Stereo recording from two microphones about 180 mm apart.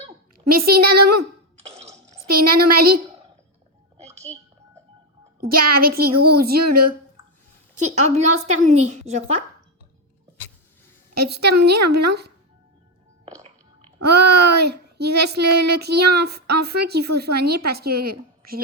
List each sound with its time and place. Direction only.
0.3 s a woman's voice: 55° right (ahead or behind)
1.6 s burping: 35° right (ahead or behind)
2.3 s child singing: 55° right (ahead or behind)
3.9 s a sound: 35° right (ahead or behind)
5.4 s child singing: 55° right (ahead or behind)
7.8 s a woman's voice: 40° right (ahead or behind)
11.1 s child singing: 65° right (ahead or behind)
14.1 s child singing: 65° right (ahead or behind)